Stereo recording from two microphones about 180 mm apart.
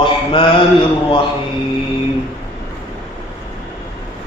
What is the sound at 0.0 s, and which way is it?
Mantra, 30° left (ahead or behind).